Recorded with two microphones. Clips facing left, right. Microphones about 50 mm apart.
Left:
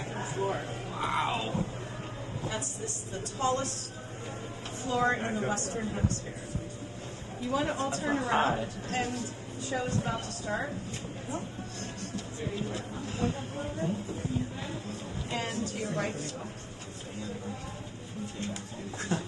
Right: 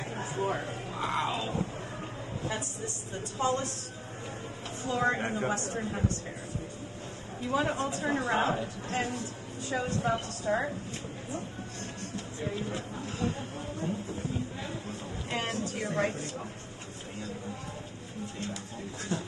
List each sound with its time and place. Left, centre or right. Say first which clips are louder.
0.4 s a woman's voice: right 1 dB; right
1.2 s speech: left 1 dB; left
3.3 s a man's voice: even; right
5.1 s a woman's voice: even; right
7.4 s a woman's voice: right 1 dB; right
8.3 s speech: left 2 dB; left
8.8 s a woman's voice: even; right
12.1 s music: right 2 dB; right
13.2 s speech: left 2 dB; left
14.6 s a woman's voice: even; right
19.1 s a sound: left 1 dB; left